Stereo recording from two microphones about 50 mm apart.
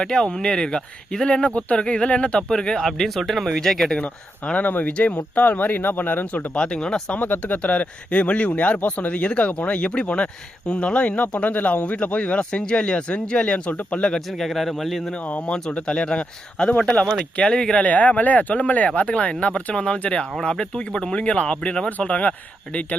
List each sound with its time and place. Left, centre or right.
0.0 s speech: centre
3.9 s speech: left
6.5 s speech: centre
7.1 s speech: left
13.7 s speech: left
14.3 s speech: centre
15.1 s speech: left
17.8 s speech: left